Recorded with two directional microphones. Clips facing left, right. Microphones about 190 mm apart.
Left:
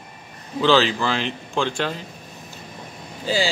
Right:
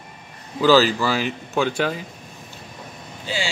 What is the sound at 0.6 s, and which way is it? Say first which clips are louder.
Speech: right 2 dB; 5° right (ahead or behind).